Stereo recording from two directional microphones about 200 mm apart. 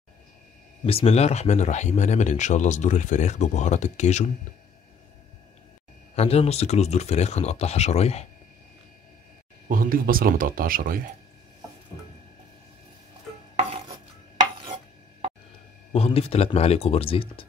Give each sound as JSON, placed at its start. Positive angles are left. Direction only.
{"t": 0.8, "sound": "speech", "side_deg": 30}
{"t": 6.1, "sound": "speech", "side_deg": 30}
{"t": 9.7, "sound": "speech", "side_deg": -45}
{"t": 15.9, "sound": "speech", "side_deg": 30}